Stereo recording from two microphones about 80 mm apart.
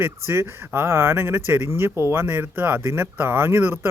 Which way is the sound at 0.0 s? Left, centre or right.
Right.